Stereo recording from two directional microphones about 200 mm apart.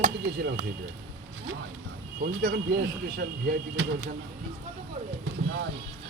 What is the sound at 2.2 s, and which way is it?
Speech, 50° right (ahead or behind).